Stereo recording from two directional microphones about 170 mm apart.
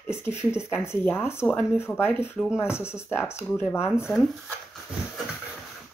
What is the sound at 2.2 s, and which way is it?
Speech, 5° right (ahead or behind).